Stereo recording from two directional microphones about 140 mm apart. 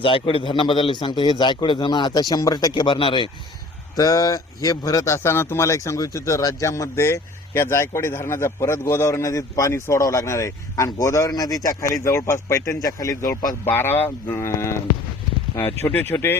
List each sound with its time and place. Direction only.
0.0 s a man's voice: 40° left (ahead or behind); by 16.4 s 15° left (ahead or behind)